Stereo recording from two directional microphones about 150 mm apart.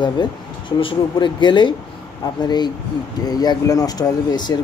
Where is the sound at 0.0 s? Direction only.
30° left (ahead or behind).